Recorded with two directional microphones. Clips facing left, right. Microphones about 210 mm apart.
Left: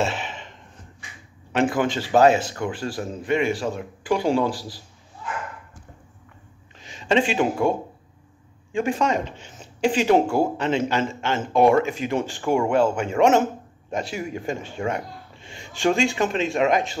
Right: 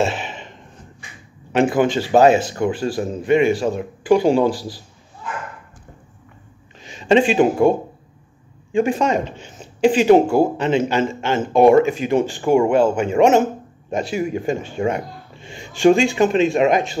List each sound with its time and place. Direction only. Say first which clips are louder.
0.0 s a sound: right 4 dB; 15° right (ahead or behind)
1.5 s speech: right 5 dB; 20° right (ahead or behind)
6.9 s speech: right 6 dB; 20° right (ahead or behind)
8.7 s speech: right 5 dB; 20° right (ahead or behind)
9.8 s speech: right 6 dB; 10° right (ahead or behind)